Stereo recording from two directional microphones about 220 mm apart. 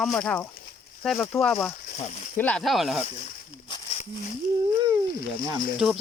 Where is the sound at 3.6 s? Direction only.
20° left (ahead or behind).